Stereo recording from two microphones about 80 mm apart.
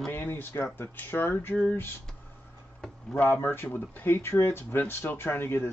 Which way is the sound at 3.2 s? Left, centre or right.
Left.